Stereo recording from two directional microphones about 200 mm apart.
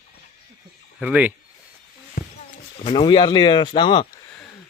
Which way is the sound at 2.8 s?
25° left (ahead or behind).